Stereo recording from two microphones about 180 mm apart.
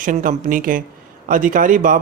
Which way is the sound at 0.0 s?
50° right (ahead or behind).